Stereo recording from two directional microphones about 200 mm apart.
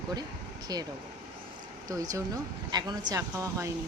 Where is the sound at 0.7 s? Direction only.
20° right (ahead or behind).